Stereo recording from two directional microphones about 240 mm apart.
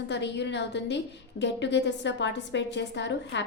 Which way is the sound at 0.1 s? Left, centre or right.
Left.